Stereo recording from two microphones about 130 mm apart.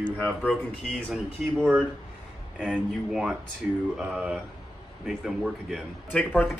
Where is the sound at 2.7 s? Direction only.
5° right (ahead or behind).